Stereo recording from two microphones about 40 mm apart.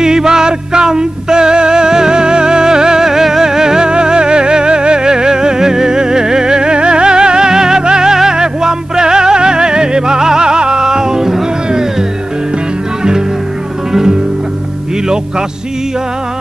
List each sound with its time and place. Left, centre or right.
0.0 s music: centre